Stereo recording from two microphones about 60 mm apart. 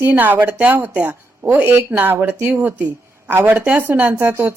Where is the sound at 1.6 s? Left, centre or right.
Right.